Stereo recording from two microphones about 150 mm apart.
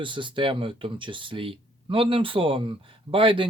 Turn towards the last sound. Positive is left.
turn(degrees=-35)  # may be behind; listen again after turning